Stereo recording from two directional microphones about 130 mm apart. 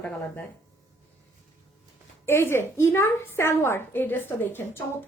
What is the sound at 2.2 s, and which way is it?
A woman's voice, 20° left (ahead or behind).